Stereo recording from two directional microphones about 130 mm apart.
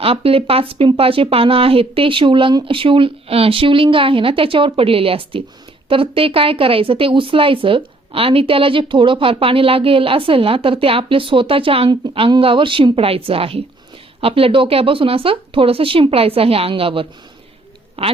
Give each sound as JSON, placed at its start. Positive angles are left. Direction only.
{"t": 0.0, "sound": "speech", "side_deg": -45}